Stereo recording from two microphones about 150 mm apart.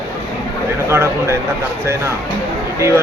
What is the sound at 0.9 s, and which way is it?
Speech, 15° right (ahead or behind).